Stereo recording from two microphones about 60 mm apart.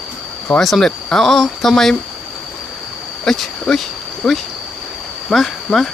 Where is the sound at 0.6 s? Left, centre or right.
Centre.